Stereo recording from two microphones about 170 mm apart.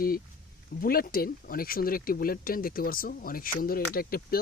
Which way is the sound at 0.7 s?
60° left (ahead or behind).